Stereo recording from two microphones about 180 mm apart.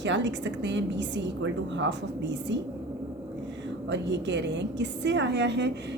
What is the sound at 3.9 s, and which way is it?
A woman's voice, 80° right.